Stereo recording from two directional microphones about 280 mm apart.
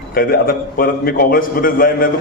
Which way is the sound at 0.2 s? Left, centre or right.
Left.